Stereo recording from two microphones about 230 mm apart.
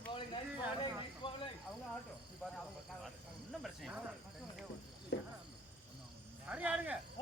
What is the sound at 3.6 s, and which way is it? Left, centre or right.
Speech, centre.